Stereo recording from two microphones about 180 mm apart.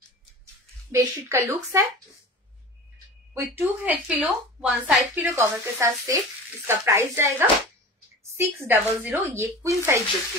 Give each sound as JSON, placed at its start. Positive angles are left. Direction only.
{"t": 0.9, "sound": "a woman's voice", "side_deg": -15}
{"t": 3.5, "sound": "a woman's voice", "side_deg": -10}